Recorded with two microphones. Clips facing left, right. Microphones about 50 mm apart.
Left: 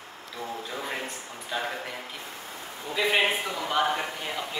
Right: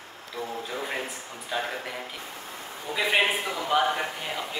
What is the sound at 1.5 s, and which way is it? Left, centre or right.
Speech, centre.